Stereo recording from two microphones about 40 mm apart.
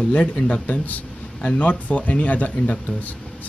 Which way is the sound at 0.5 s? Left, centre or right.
Left.